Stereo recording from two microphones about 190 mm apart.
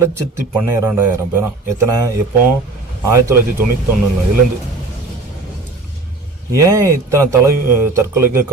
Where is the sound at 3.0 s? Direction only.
15° right (ahead or behind).